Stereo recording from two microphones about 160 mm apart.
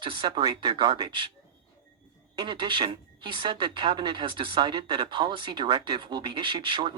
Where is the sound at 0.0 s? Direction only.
30° right (ahead or behind).